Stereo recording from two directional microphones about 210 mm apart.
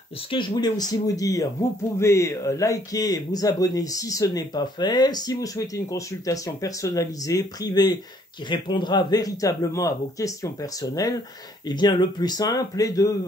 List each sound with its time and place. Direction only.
0.3 s speech: 20° left (ahead or behind)